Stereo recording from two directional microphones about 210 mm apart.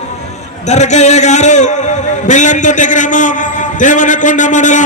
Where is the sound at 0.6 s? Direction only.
35° left (ahead or behind).